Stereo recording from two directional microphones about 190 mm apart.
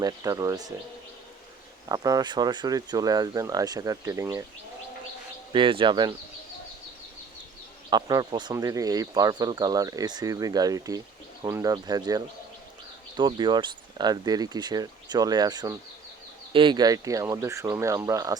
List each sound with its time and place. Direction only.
0.0 s speech: 20° right (ahead or behind)
1.9 s speech: 20° right (ahead or behind)
5.5 s speech: 25° right (ahead or behind)
7.9 s speech: 20° right (ahead or behind)